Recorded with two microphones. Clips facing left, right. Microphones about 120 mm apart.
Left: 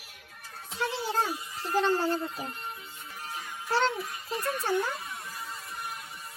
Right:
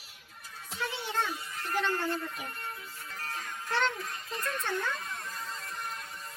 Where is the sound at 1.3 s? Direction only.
5° left (ahead or behind).